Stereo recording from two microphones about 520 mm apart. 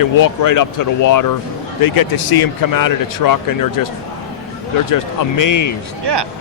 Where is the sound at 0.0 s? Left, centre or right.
Left.